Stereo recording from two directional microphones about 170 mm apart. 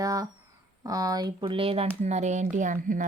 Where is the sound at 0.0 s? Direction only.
20° right (ahead or behind).